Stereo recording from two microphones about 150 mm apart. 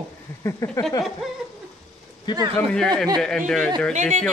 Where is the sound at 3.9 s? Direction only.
55° right (ahead or behind).